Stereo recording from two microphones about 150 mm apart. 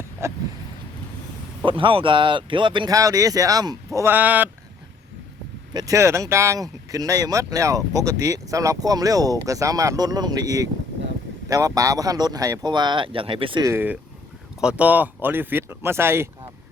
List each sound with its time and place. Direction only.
0.2 s speech: 20° right (ahead or behind)
1.6 s speech: 35° right (ahead or behind); by 4.4 s 10° right (ahead or behind)
5.7 s speech: 20° right (ahead or behind)
13.7 s speech: 10° right (ahead or behind)